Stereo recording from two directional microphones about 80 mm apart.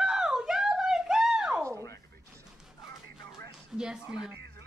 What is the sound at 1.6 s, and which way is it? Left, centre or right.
Music, right.